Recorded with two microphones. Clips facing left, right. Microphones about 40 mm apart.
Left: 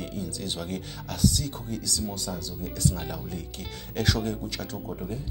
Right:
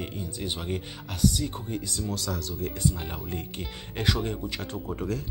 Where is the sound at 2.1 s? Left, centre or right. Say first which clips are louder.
Right 2 dB; right.